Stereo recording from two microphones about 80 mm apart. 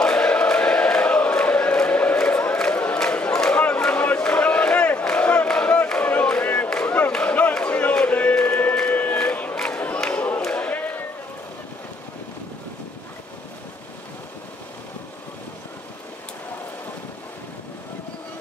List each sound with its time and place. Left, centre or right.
0.0 s chant: centre
2.1 s crowd: centre
3.0 s a sound: centre
5.0 s crowd: centre
8.7 s a sound: centre
9.9 s crowd: centre
10.4 s basketball bounce: centre